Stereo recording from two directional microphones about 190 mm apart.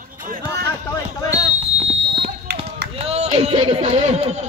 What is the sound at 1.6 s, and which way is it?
Fire alarm, 30° right (ahead or behind).